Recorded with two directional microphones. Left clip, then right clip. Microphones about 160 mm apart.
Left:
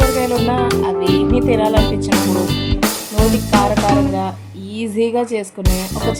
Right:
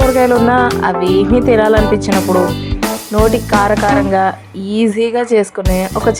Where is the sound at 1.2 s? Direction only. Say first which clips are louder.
Right 4 dB; 25° right (ahead or behind).